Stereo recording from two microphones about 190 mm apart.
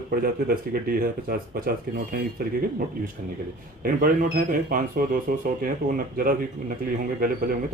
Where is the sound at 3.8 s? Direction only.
50° right (ahead or behind).